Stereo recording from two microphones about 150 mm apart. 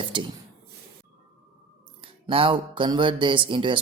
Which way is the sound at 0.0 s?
30° right (ahead or behind).